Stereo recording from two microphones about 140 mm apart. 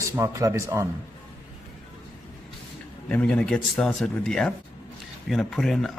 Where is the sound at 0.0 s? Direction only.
20° right (ahead or behind).